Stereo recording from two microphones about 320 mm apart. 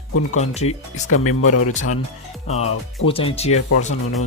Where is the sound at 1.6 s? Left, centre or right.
Left.